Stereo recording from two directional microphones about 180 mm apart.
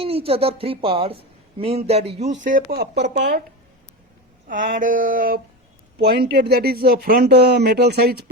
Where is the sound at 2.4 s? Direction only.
50° right (ahead or behind).